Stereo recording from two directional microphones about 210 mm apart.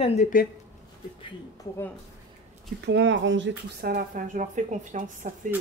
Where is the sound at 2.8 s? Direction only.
55° right (ahead or behind); by 5.3 s 35° right (ahead or behind).